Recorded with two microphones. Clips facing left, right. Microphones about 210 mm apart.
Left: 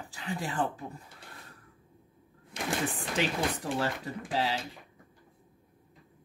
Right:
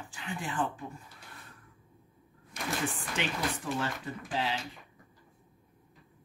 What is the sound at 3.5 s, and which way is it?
Speech, 35° left (ahead or behind).